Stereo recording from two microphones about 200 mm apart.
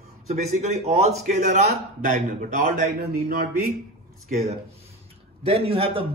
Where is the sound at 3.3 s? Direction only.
50° right (ahead or behind).